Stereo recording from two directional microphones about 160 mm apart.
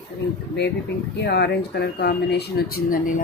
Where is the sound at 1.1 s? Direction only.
90° left; by 3.2 s 60° left (ahead or behind).